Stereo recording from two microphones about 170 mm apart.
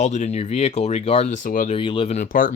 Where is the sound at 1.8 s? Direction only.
30° left (ahead or behind); by 2.5 s 55° left (ahead or behind).